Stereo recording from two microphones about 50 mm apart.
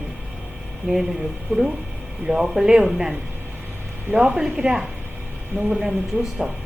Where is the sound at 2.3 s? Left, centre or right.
Centre.